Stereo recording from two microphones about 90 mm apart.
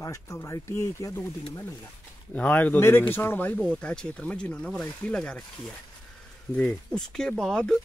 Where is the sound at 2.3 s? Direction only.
15° left (ahead or behind).